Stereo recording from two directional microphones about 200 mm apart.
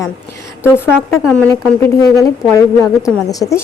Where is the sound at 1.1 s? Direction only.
Centre (ahead or behind).